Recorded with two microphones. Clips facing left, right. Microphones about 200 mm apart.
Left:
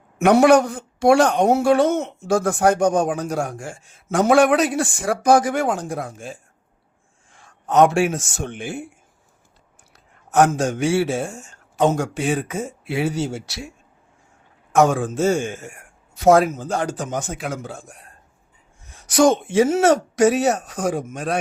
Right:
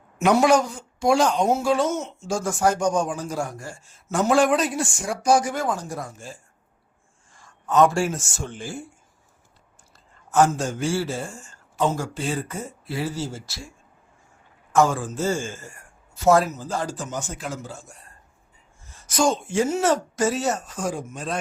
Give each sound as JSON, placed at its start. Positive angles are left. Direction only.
{"t": 0.2, "sound": "speech", "side_deg": 60}
{"t": 7.7, "sound": "speech", "side_deg": 75}
{"t": 9.9, "sound": "a man's voice", "side_deg": 70}
{"t": 18.8, "sound": "speech", "side_deg": 70}